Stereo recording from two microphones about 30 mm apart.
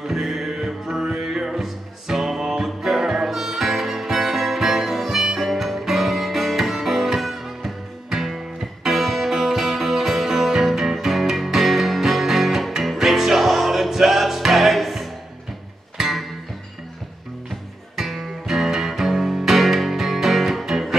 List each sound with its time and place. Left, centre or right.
0.0 s music: centre
16.0 s music: centre
17.9 s music: centre